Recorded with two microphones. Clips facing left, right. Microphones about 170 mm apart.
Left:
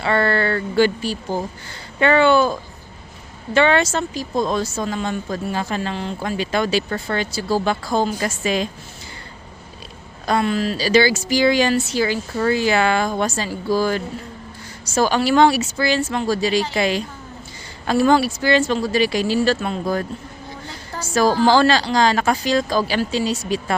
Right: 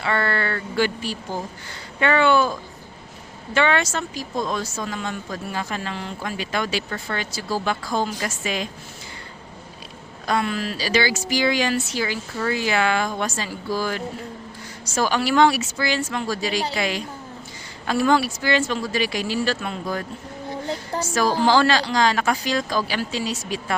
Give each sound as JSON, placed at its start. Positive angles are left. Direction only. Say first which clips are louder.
{"t": 0.0, "sound": "speech", "louder": "left 5 dB", "side_deg": 30}
{"t": 10.2, "sound": "a woman's voice", "louder": "left 4 dB", "side_deg": 30}
{"t": 21.2, "sound": "speech", "louder": "left 4 dB", "side_deg": 35}